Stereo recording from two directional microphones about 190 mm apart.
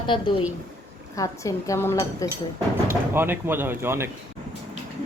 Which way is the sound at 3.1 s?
10° right (ahead or behind).